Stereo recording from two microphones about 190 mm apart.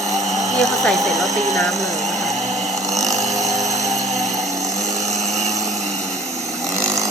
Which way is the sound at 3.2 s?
20° right (ahead or behind).